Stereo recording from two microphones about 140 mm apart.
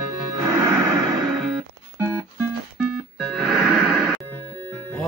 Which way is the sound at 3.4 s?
Centre (ahead or behind).